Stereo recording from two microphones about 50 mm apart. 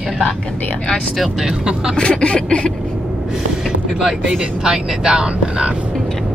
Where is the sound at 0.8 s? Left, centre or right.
Centre.